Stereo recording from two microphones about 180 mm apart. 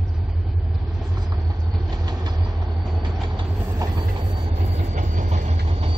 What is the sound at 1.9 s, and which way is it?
Vehicle, 20° right (ahead or behind).